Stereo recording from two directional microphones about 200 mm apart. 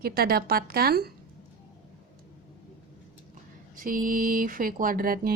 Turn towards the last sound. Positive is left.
turn(degrees=-45)  # may be behind; listen again after turning